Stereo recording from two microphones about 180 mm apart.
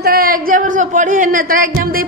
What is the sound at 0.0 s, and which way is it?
A woman's voice, 55° right (ahead or behind).